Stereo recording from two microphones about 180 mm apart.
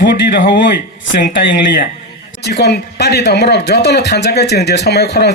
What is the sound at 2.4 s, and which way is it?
A man's voice, 70° left (ahead or behind).